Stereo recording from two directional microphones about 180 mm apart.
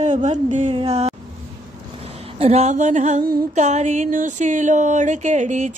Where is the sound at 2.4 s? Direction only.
35° right (ahead or behind).